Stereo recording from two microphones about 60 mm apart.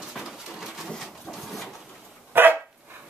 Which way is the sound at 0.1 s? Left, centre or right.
Centre.